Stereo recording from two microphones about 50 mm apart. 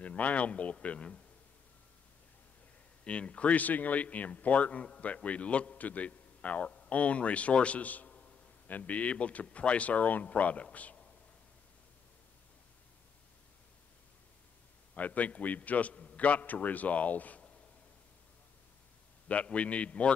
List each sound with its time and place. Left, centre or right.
0.0 s speech: left
3.0 s speech: left
15.0 s a man's voice: left
19.2 s speech: left